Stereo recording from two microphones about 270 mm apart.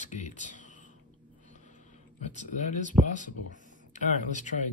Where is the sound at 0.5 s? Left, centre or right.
Left.